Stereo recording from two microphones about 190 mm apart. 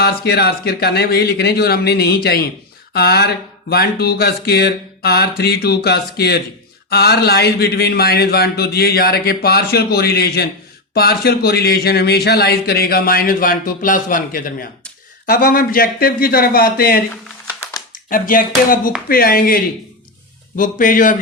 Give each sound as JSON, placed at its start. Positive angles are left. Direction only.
{"t": 0.0, "sound": "a man's voice", "side_deg": 55}
{"t": 17.4, "sound": "a sound", "side_deg": 15}
{"t": 17.9, "sound": "speech", "side_deg": 45}